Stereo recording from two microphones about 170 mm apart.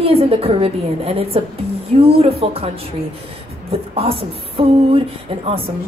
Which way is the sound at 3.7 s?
35° right (ahead or behind).